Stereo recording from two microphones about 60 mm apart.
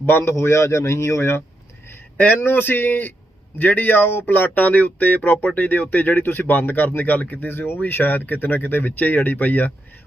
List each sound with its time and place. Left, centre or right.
0.0 s a man's voice: left
2.1 s speech: left